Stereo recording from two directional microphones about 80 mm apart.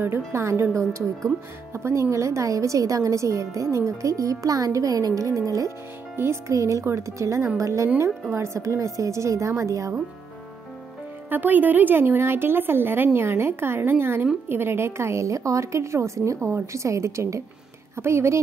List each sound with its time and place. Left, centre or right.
0.0 s speech: right
1.7 s speech: right
11.2 s a woman's voice: right